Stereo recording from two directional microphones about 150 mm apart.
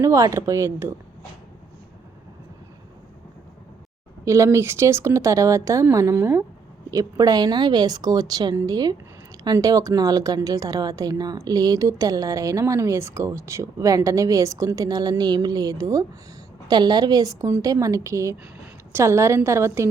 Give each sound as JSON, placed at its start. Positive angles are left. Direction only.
{"t": 0.0, "sound": "speech", "side_deg": -20}
{"t": 4.3, "sound": "speech", "side_deg": -20}